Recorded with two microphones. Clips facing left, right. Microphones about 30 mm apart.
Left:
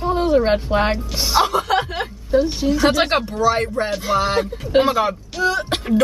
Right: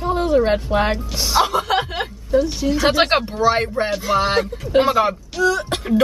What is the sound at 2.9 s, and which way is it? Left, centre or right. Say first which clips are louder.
Speech: right 1 dB; centre.